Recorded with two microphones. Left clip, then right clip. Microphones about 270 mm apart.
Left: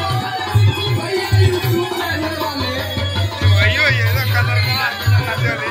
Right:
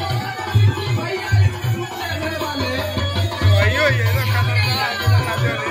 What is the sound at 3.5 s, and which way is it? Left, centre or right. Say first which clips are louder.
Music: left 2 dB; centre.